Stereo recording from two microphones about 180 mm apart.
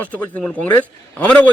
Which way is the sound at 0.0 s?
5° left (ahead or behind).